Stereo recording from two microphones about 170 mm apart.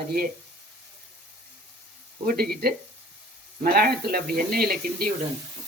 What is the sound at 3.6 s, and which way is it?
Speech, 60° right (ahead or behind).